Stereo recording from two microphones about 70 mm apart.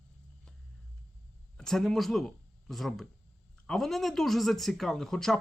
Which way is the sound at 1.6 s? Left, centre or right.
Centre.